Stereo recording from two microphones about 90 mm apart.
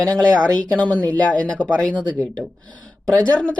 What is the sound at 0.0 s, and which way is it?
Speech, 15° left (ahead or behind).